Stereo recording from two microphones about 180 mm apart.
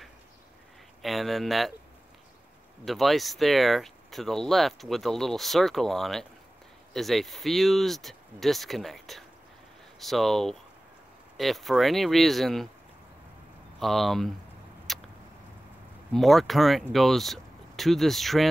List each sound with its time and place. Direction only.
1.0 s speech: centre (ahead or behind)
2.8 s speech: centre (ahead or behind)
13.7 s speech: centre (ahead or behind)
14.9 s a sound: centre (ahead or behind)
16.1 s speech: centre (ahead or behind)